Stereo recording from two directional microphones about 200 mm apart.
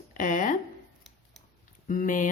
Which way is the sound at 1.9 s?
40° left (ahead or behind).